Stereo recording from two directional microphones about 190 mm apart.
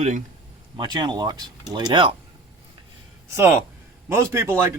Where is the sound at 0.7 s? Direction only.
25° right (ahead or behind).